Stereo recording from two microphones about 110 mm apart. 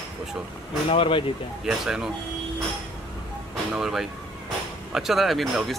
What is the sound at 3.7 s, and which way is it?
Speech, 5° right (ahead or behind).